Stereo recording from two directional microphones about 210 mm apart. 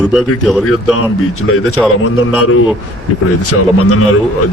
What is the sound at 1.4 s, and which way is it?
Speech, 90° left.